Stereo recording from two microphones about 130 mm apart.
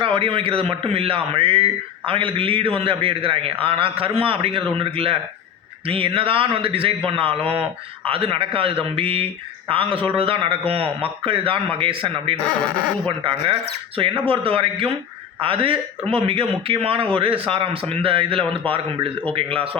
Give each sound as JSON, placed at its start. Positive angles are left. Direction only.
{"t": 0.0, "sound": "a man's voice", "side_deg": -40}